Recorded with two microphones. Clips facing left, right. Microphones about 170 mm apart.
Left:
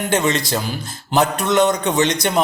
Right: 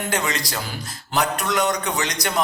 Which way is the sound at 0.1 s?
25° left (ahead or behind).